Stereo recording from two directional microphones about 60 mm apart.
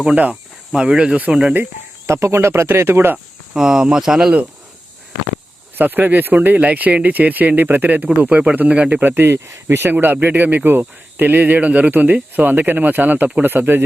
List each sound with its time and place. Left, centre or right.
0.7 s speech: centre
2.0 s speech: right
3.5 s speech: centre
5.7 s speech: right